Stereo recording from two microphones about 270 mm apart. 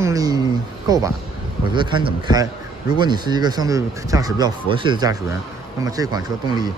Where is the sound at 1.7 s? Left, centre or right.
Centre.